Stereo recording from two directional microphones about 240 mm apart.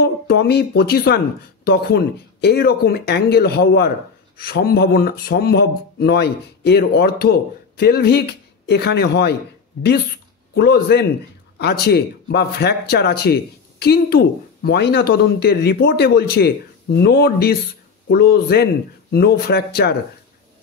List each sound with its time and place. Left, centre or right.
0.0 s a man's voice: left
10.5 s a man's voice: left